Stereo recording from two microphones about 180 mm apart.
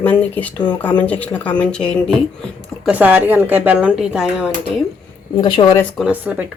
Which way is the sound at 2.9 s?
10° right (ahead or behind).